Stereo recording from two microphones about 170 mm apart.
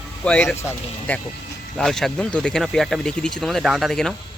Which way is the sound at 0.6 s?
15° left (ahead or behind).